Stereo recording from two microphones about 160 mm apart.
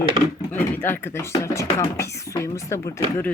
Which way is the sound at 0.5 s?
10° left (ahead or behind).